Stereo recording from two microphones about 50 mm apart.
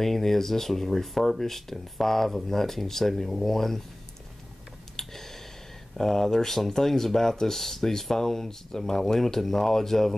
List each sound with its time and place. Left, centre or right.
0.0 s speech: centre
4.9 s a sound: centre
5.9 s speech: centre